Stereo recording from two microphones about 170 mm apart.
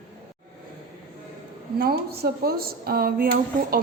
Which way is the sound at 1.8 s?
65° right (ahead or behind).